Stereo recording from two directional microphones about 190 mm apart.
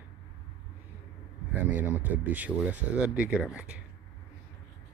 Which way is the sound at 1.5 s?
10° right (ahead or behind).